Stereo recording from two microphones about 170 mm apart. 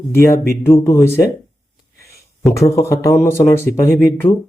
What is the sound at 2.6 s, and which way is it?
Speech, 15° left (ahead or behind).